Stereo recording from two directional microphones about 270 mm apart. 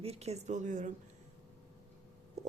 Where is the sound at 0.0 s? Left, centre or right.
Right.